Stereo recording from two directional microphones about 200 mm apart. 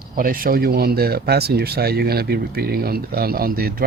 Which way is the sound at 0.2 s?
45° right (ahead or behind).